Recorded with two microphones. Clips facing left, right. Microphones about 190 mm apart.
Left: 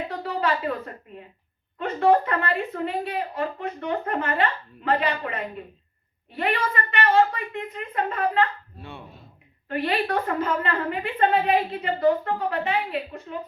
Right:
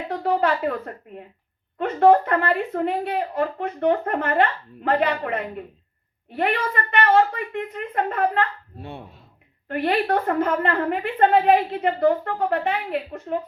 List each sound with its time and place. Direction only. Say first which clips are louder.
0.1 s a woman's voice: right 8 dB; 55° right (ahead or behind)